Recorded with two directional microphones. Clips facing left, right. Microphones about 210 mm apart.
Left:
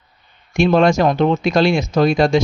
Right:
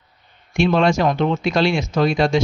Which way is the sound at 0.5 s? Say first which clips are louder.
Left 3 dB; 45° left (ahead or behind).